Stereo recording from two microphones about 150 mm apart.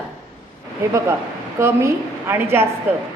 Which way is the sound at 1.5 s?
15° right (ahead or behind).